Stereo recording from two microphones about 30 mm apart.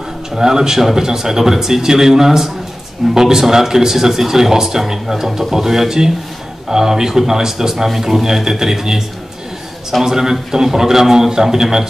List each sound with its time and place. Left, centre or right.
0.4 s speech: centre
10.0 s a man's voice: centre